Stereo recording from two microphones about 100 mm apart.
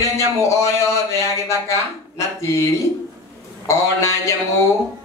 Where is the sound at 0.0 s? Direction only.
30° left (ahead or behind).